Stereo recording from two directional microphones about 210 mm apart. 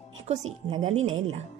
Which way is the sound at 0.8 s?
30° right (ahead or behind).